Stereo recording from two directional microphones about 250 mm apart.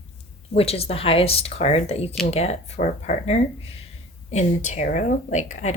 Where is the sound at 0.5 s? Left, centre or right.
Left.